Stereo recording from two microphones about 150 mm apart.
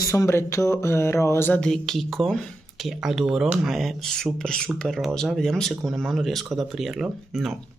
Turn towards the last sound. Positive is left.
turn(degrees=0)  # may be behind; listen again after turning